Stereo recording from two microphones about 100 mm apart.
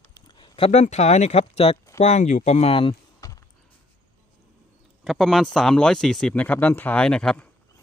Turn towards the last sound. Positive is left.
turn(degrees=10)  # may be behind; listen again after turning